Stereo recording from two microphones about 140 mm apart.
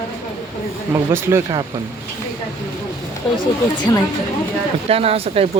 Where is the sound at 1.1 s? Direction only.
20° right (ahead or behind).